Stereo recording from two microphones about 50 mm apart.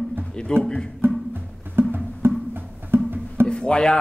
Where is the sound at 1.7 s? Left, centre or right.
Right.